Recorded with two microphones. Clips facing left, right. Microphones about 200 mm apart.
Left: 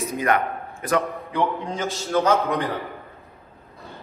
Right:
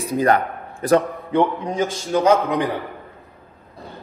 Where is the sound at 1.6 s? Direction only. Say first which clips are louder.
Right 5 dB; 15° right (ahead or behind).